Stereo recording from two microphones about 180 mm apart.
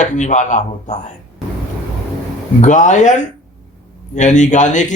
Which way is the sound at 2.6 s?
45° left (ahead or behind).